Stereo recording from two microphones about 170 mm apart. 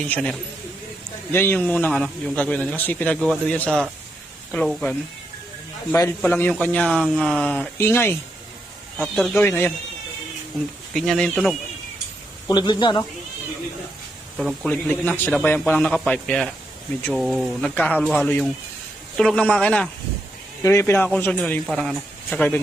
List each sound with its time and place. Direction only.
0.0 s a man's voice: 5° left (ahead or behind)
6.0 s a man's voice: 15° left (ahead or behind)
7.8 s a man's voice: 15° left (ahead or behind)
9.0 s a man's voice: centre (ahead or behind)
10.9 s speech: centre (ahead or behind)
12.5 s speech: 25° left (ahead or behind)
14.3 s a man's voice: centre (ahead or behind)